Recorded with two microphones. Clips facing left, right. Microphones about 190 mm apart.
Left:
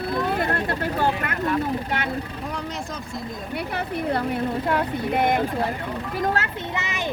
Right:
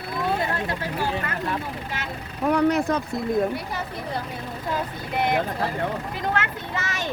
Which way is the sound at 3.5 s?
60° left (ahead or behind).